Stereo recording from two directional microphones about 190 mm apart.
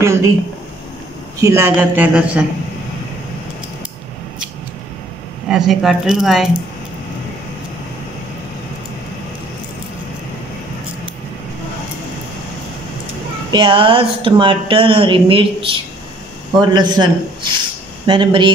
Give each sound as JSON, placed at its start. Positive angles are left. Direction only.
{"t": 1.4, "sound": "a man's voice", "side_deg": -15}
{"t": 5.5, "sound": "speech", "side_deg": -5}
{"t": 13.5, "sound": "speech", "side_deg": -25}